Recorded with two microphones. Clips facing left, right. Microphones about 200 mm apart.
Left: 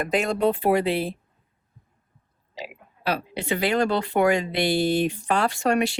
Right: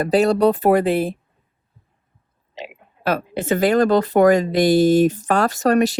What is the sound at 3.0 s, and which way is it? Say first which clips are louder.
Speech: right 5 dB; 50° right (ahead or behind).